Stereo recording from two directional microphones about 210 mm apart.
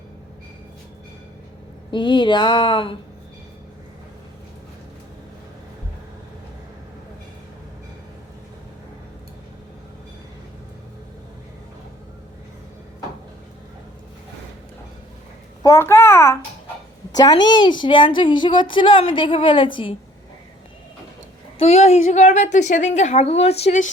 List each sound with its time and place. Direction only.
1.9 s a woman's voice: 20° left (ahead or behind)
15.6 s a child's voice: 15° left (ahead or behind)
21.6 s a woman's voice: 30° left (ahead or behind)